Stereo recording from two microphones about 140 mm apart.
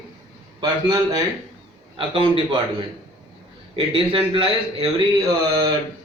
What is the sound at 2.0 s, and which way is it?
Speech, 40° right (ahead or behind).